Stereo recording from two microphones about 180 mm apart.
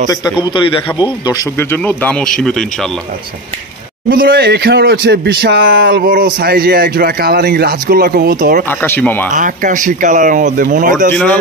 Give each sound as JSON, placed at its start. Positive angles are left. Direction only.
{"t": 1.2, "sound": "speech", "side_deg": 15}
{"t": 4.1, "sound": "speech", "side_deg": -55}
{"t": 5.9, "sound": "speech", "side_deg": -55}
{"t": 8.6, "sound": "speech", "side_deg": 10}
{"t": 9.3, "sound": "speech", "side_deg": -45}